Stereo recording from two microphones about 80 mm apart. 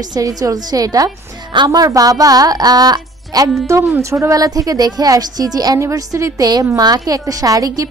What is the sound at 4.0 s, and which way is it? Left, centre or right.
A woman's voice, right.